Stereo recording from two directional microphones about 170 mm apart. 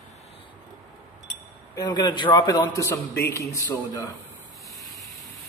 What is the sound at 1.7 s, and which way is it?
A man's voice, 25° left (ahead or behind).